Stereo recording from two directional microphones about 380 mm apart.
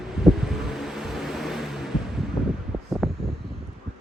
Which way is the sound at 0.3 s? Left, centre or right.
Centre.